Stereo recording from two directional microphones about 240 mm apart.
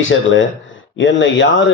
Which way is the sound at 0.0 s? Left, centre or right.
Left.